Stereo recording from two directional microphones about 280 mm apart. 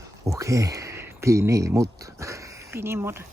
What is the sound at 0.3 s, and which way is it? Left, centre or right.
Speech, centre.